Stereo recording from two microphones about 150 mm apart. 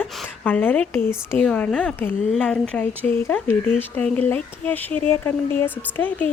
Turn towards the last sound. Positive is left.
turn(degrees=15)  # may be behind; listen again after turning